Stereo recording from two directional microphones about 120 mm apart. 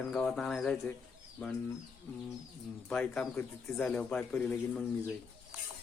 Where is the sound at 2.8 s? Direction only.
5° left (ahead or behind).